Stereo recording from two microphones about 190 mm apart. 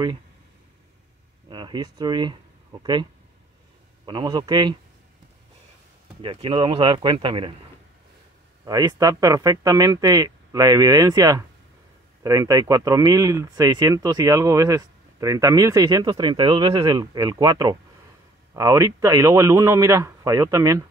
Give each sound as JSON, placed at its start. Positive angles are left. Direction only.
{"t": 1.5, "sound": "speech", "side_deg": -25}
{"t": 6.2, "sound": "speech", "side_deg": -25}
{"t": 8.6, "sound": "a man's voice", "side_deg": -20}